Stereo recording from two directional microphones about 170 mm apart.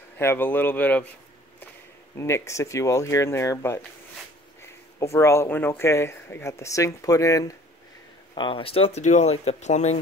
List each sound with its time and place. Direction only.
0.2 s speech: 10° left (ahead or behind)
2.1 s speech: 15° left (ahead or behind)
8.4 s speech: 30° left (ahead or behind)